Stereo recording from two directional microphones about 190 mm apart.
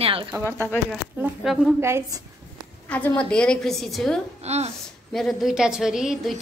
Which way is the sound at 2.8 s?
10° left (ahead or behind).